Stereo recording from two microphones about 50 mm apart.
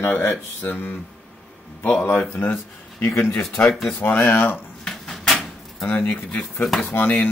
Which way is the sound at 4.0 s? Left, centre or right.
Left.